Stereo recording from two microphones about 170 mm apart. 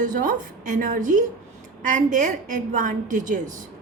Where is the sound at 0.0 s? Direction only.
50° right (ahead or behind).